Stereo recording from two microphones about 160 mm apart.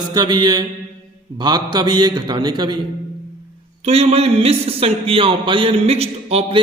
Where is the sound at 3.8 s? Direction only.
40° right (ahead or behind).